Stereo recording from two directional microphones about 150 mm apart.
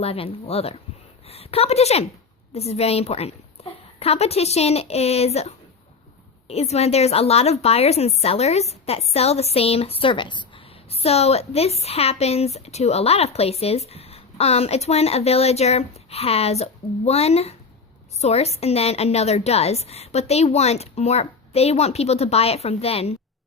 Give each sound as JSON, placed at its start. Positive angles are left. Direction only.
{"t": 0.0, "sound": "a woman's voice", "side_deg": 40}